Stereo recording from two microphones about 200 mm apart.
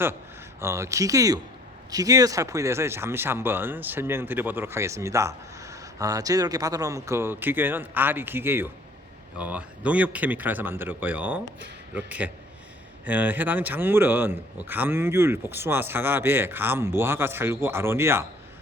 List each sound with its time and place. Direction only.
0.6 s speech: 15° right (ahead or behind)